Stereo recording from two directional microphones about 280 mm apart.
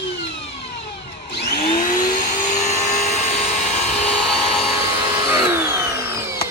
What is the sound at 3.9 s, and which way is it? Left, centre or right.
Helicopter, centre.